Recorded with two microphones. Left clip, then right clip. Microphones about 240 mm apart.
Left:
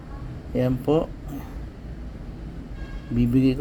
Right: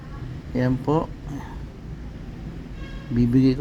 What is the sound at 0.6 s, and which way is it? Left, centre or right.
Speech, centre.